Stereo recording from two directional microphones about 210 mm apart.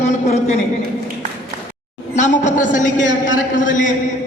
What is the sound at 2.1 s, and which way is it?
A man's voice, 35° left (ahead or behind).